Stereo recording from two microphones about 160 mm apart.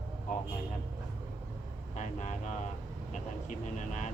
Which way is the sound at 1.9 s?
50° left (ahead or behind).